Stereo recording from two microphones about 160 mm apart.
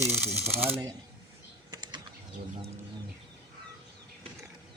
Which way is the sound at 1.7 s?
25° right (ahead or behind).